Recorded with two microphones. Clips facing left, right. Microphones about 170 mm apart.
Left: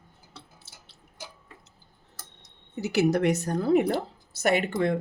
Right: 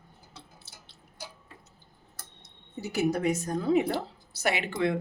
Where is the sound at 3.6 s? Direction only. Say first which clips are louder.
Left 3 dB; 55° left (ahead or behind).